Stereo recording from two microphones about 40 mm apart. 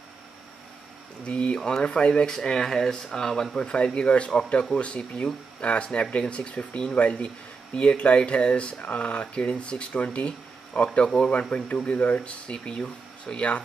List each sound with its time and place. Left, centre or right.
1.2 s speech: left
1.8 s speech: left
2.2 s speech: centre
3.5 s speech: left
11.1 s speech: centre
11.5 s speech: left